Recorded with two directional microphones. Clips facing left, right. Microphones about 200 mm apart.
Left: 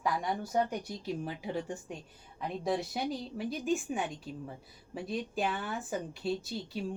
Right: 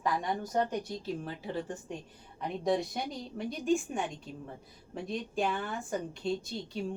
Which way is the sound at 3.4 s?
5° left (ahead or behind).